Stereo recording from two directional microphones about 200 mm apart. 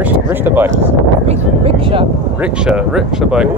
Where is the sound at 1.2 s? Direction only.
30° right (ahead or behind).